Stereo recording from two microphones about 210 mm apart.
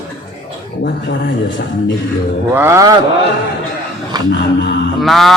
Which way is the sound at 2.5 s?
10° right (ahead or behind).